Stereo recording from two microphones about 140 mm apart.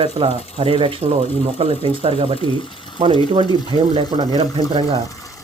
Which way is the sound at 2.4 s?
35° left (ahead or behind).